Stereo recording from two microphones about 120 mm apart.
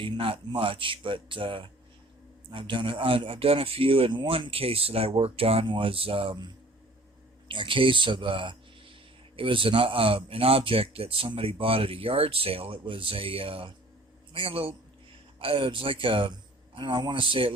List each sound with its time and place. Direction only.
0.0 s speech: 45° right (ahead or behind)